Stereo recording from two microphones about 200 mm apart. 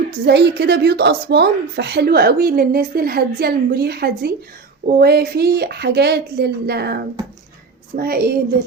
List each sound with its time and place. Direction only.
0.3 s a woman's voice: 55° right (ahead or behind)